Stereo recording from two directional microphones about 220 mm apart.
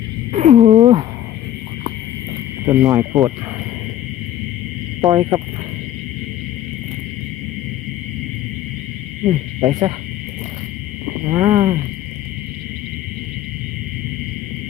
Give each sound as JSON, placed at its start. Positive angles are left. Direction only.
{"t": 0.3, "sound": "speech", "side_deg": -35}
{"t": 2.6, "sound": "hoot", "side_deg": -15}
{"t": 4.9, "sound": "speech", "side_deg": -15}
{"t": 9.2, "sound": "hoot", "side_deg": -15}
{"t": 11.3, "sound": "hoot", "side_deg": -15}